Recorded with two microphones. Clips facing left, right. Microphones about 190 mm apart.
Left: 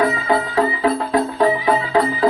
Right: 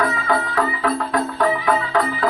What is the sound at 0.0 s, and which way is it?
Music, 25° left (ahead or behind).